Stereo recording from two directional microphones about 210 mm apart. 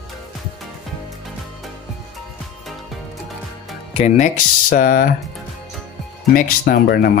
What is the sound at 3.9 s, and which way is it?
Speech, 35° left (ahead or behind).